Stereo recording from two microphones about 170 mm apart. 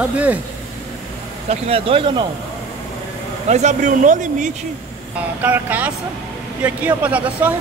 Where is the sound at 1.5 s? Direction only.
35° right (ahead or behind).